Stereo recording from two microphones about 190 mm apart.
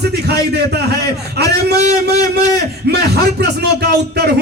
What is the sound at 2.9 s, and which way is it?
Speech, 60° right (ahead or behind).